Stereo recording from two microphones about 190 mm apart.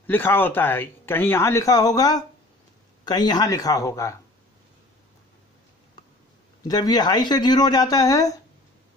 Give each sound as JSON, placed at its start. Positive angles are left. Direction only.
{"t": 0.0, "sound": "speech", "side_deg": 10}
{"t": 6.7, "sound": "speech", "side_deg": 20}